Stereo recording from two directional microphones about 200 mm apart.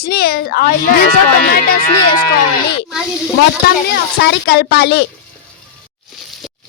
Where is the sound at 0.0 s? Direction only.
50° left (ahead or behind).